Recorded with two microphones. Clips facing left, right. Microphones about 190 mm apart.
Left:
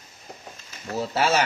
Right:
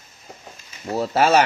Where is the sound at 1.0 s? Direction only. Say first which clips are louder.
Right 5 dB; 55° right (ahead or behind).